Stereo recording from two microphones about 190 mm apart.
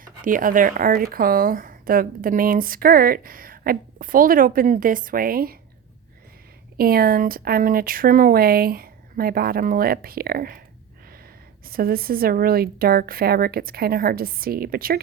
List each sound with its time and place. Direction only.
0.0 s speech: 45° right (ahead or behind)
6.7 s speech: 50° right (ahead or behind)
11.6 s speech: 50° right (ahead or behind)